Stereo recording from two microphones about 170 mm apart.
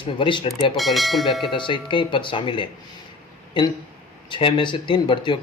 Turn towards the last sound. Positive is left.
turn(degrees=30)  # may be behind; listen again after turning